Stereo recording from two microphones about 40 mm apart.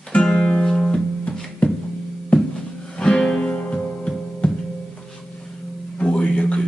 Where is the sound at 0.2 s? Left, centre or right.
Left.